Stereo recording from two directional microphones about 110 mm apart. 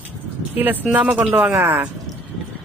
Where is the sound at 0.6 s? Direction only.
15° right (ahead or behind).